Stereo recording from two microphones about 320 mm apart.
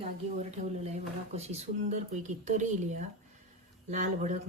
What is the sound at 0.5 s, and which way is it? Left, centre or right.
Speech, right.